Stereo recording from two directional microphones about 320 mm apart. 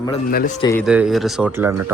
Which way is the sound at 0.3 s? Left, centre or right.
Left.